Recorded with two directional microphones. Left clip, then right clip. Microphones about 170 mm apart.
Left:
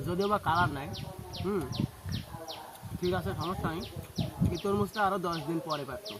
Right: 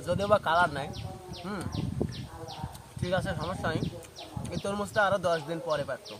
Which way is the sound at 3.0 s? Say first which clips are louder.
Right 2 dB; 30° right (ahead or behind).